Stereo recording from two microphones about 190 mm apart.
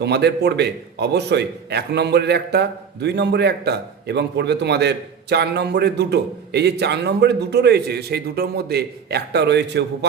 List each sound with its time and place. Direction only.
0.0 s a man's voice: 60° right (ahead or behind)